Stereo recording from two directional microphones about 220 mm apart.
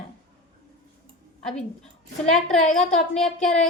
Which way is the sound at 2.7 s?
Centre (ahead or behind).